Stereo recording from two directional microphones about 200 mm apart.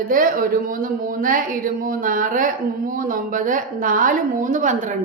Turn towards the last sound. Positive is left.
turn(degrees=-40)  # may be behind; listen again after turning